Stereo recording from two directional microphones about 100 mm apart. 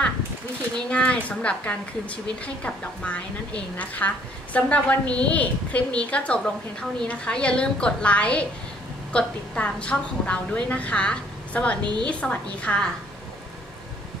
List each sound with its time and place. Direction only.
0.8 s speech: 10° left (ahead or behind)
11.8 s a woman's voice: 45° right (ahead or behind)
12.1 s speech: 10° left (ahead or behind)